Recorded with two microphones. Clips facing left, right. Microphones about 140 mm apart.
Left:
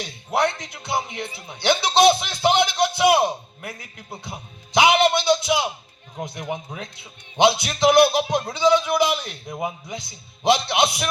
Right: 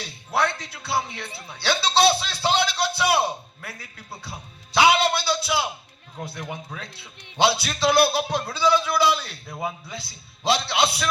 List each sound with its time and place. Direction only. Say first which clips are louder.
0.0 s speech: left 3 dB; 20° left (ahead or behind)